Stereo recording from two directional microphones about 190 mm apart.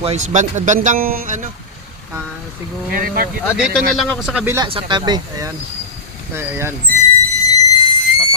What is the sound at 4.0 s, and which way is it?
Speech, centre (ahead or behind).